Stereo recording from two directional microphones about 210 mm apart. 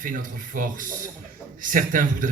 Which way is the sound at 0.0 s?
40° right (ahead or behind).